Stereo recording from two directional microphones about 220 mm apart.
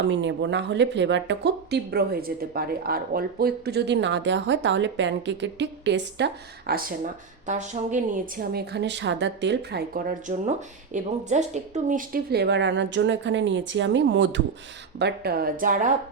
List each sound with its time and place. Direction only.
0.1 s a woman's voice: 55° right (ahead or behind); by 15.9 s 40° right (ahead or behind)